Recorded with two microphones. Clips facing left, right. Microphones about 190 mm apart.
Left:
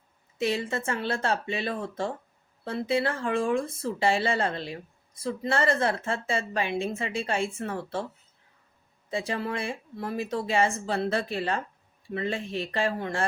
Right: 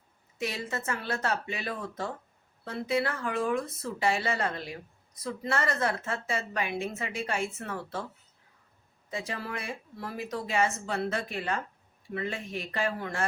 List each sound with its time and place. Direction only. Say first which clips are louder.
0.3 s speech: left 6 dB; 30° left (ahead or behind)
9.0 s speech: left 6 dB; 30° left (ahead or behind)